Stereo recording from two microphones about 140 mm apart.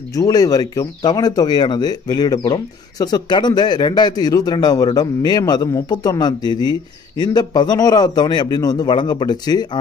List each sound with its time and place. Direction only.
0.1 s speech: 25° left (ahead or behind)